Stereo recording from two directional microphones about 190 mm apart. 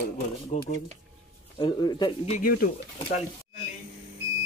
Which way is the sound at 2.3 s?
50° left (ahead or behind).